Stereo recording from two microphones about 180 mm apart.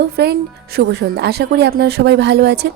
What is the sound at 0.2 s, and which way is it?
A woman's voice, 65° right (ahead or behind).